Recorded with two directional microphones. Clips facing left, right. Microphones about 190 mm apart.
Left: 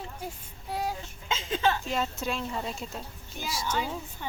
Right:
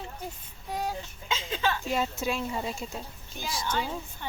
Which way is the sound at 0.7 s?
5° left (ahead or behind).